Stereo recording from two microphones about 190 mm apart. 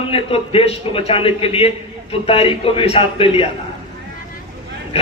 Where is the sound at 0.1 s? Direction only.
30° left (ahead or behind).